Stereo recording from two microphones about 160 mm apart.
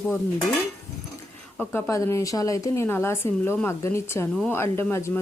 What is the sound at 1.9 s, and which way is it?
Speech, 20° left (ahead or behind).